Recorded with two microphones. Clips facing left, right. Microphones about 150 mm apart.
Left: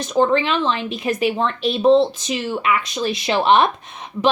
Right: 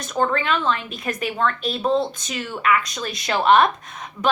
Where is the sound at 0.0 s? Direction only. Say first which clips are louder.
Left 5 dB; 25° left (ahead or behind).